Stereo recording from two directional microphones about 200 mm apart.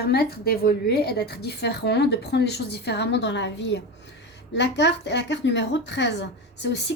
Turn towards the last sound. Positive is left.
turn(degrees=60)  # may be behind; listen again after turning